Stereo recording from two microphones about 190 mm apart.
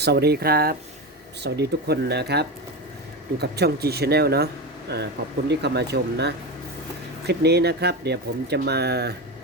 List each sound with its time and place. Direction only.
0.0 s speech: 60° right (ahead or behind)